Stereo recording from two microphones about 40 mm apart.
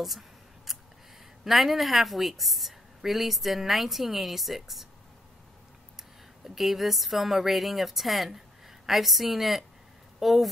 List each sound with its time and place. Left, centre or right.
0.7 s scissors: centre
1.4 s a woman's voice: centre
6.4 s a woman's voice: centre